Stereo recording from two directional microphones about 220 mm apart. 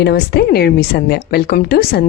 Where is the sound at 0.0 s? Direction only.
45° left (ahead or behind).